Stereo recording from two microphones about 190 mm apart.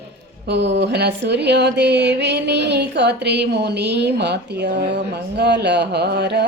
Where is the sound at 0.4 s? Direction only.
65° right (ahead or behind).